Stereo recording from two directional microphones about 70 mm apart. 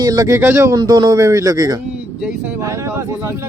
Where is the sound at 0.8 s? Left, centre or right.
Right.